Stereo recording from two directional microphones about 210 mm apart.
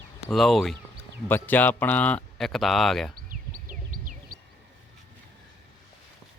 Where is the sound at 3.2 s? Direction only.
40° right (ahead or behind).